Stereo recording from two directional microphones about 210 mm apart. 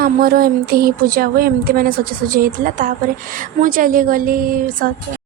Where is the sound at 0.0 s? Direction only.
45° right (ahead or behind).